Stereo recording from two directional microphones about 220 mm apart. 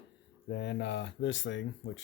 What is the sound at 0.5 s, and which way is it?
Speech, 50° left (ahead or behind).